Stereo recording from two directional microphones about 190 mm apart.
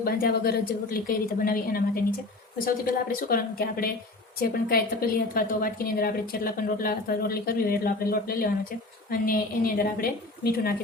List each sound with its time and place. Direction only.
0.0 s a woman's voice: 55° left (ahead or behind)